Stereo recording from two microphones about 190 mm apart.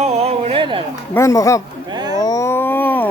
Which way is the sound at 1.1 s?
15° left (ahead or behind).